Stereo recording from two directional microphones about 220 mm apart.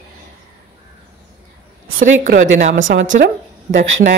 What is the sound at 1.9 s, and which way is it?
Speech, 40° right (ahead or behind).